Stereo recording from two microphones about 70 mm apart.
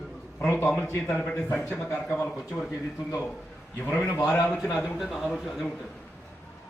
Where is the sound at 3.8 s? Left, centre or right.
Left.